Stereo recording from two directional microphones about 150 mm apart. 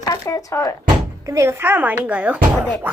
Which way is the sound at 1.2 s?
20° right (ahead or behind).